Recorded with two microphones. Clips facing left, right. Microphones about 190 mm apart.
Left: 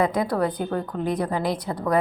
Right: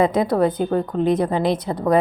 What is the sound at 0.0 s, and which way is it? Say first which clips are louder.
A woman's voice: right 5 dB; 25° right (ahead or behind).